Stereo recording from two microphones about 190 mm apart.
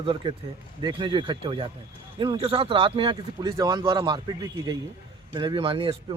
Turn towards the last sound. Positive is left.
turn(degrees=-30)  # may be behind; listen again after turning